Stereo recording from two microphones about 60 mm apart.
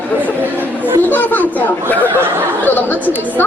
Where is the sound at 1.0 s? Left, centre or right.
Left.